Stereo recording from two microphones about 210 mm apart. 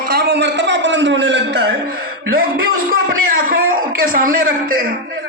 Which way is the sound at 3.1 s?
40° right (ahead or behind).